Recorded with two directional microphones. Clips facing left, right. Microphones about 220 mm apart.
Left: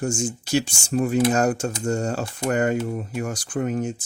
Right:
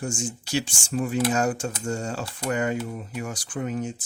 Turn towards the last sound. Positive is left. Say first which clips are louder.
# left 4 dB
turn(degrees=50)  # may be behind; listen again after turning